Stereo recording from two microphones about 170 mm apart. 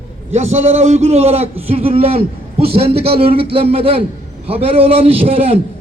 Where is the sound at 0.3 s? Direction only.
40° right (ahead or behind).